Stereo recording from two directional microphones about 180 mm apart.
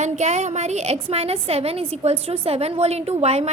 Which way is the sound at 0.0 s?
40° right (ahead or behind).